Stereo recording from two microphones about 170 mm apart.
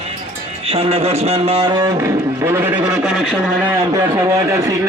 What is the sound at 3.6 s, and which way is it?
A man's voice, 15° right (ahead or behind).